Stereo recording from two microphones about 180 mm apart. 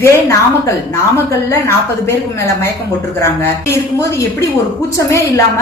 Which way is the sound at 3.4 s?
15° left (ahead or behind).